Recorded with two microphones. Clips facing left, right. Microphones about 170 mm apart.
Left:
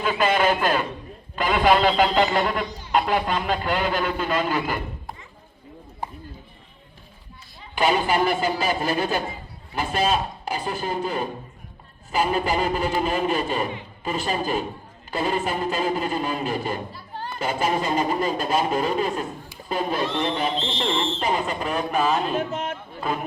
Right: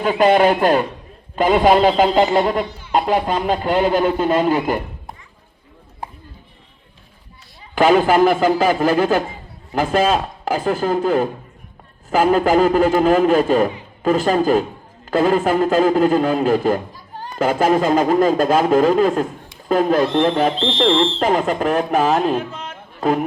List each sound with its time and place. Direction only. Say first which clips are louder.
0.0 s a man's voice: right 7 dB; 40° right (ahead or behind)
1.5 s speech: right 4 dB; 30° right (ahead or behind)
3.8 s speech: right 8 dB; 25° right (ahead or behind)
7.8 s speech: right 8 dB; 90° right
16.9 s a sound: even; 15° right (ahead or behind)
17.3 s speech: right 8 dB; 90° right
22.4 s speech: even; 50° left (ahead or behind)
23.0 s speech: right 10 dB; 45° right (ahead or behind)